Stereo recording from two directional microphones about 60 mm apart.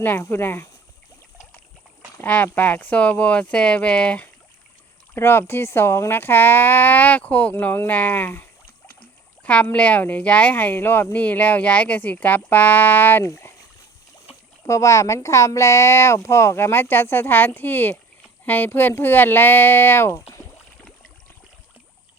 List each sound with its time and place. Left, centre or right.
0.0 s speech: left
2.2 s speech: left
5.1 s speech: left
9.4 s speech: left
13.2 s speech: left
14.7 s speech: left